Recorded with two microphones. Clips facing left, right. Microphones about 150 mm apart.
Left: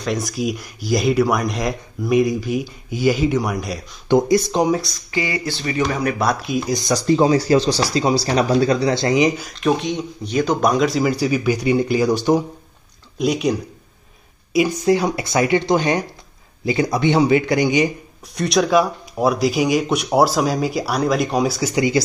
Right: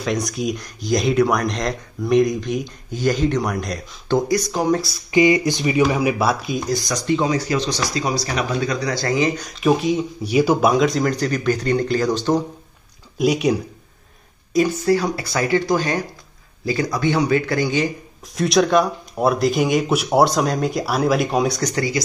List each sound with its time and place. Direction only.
0.0 s speech: centre (ahead or behind)
4.1 s speech: 25° left (ahead or behind)
4.6 s speech: centre (ahead or behind)
5.1 s speech: 20° right (ahead or behind); by 6.7 s centre (ahead or behind)
6.7 s speech: 25° left (ahead or behind)
9.4 s speech: centre (ahead or behind)
13.2 s speech: 5° right (ahead or behind)
14.5 s speech: 10° left (ahead or behind)
18.3 s speech: centre (ahead or behind)